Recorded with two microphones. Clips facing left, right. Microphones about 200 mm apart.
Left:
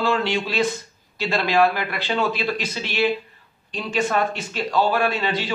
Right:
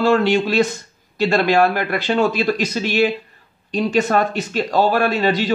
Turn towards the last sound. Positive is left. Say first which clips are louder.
# right 6 dB
turn(degrees=-40)  # may be behind; listen again after turning